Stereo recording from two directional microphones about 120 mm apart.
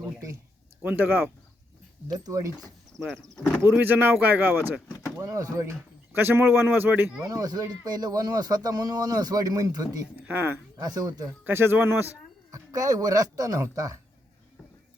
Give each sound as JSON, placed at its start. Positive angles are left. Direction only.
{"t": 0.8, "sound": "speech", "side_deg": -15}
{"t": 2.1, "sound": "speech", "side_deg": -30}
{"t": 3.6, "sound": "speech", "side_deg": -15}
{"t": 5.1, "sound": "speech", "side_deg": -30}
{"t": 6.1, "sound": "speech", "side_deg": -15}
{"t": 7.3, "sound": "speech", "side_deg": -35}
{"t": 10.2, "sound": "speech", "side_deg": -15}
{"t": 10.8, "sound": "speech", "side_deg": -30}
{"t": 11.4, "sound": "speech", "side_deg": -20}
{"t": 12.5, "sound": "speech", "side_deg": -30}